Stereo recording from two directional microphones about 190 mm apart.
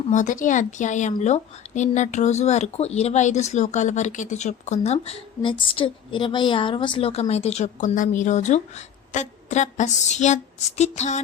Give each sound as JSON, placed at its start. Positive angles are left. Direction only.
{"t": 0.1, "sound": "speech", "side_deg": 40}